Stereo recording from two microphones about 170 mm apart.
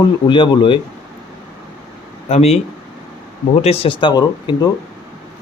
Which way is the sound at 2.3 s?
40° left (ahead or behind).